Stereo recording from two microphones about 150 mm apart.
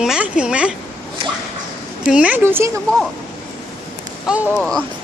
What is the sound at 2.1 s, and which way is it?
Speech, 10° right (ahead or behind).